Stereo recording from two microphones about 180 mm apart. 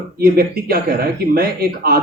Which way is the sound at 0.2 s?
55° right (ahead or behind).